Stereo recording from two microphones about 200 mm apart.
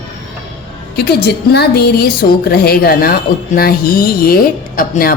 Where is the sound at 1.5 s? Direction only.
50° left (ahead or behind).